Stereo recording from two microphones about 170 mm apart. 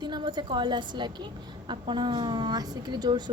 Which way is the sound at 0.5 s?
30° right (ahead or behind).